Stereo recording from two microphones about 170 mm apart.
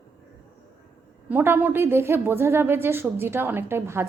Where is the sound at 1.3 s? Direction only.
10° right (ahead or behind).